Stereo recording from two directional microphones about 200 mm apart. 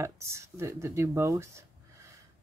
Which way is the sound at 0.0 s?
15° right (ahead or behind).